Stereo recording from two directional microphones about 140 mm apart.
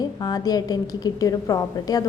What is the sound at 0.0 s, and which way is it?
A woman's voice, 25° left (ahead or behind).